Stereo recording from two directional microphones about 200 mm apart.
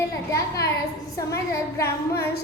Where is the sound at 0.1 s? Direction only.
15° left (ahead or behind).